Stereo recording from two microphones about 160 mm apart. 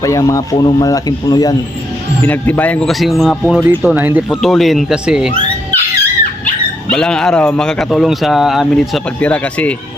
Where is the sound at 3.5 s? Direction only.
10° right (ahead or behind).